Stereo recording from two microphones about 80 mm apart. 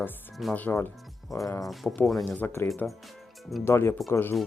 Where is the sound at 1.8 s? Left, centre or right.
Centre.